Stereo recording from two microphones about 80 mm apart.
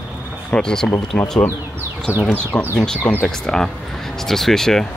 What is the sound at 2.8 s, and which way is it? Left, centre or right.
Speech, centre.